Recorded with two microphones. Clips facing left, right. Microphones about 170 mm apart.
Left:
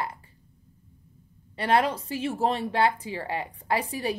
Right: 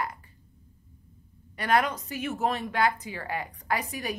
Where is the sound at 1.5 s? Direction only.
30° left (ahead or behind).